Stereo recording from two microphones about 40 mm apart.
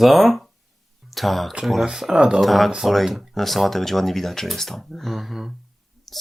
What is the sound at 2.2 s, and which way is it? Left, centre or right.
Speech, right.